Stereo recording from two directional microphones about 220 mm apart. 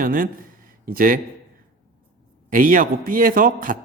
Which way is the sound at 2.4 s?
40° right (ahead or behind).